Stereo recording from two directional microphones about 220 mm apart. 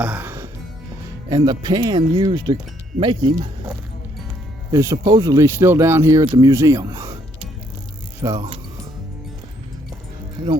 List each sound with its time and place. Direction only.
0.0 s music: 5° right (ahead or behind)
1.3 s speech: 15° right (ahead or behind)
8.2 s speech: 20° right (ahead or behind)